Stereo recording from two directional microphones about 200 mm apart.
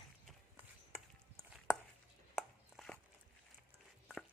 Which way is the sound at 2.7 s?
Centre (ahead or behind).